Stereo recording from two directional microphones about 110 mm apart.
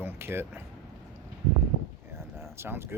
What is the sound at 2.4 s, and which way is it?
Speech, 25° right (ahead or behind).